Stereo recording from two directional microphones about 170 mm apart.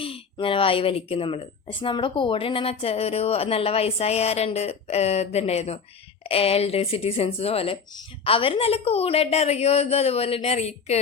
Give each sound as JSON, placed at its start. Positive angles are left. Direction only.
{"t": 0.0, "sound": "speech", "side_deg": 30}